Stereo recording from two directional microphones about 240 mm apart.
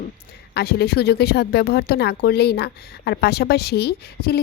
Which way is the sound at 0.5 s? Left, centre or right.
Left.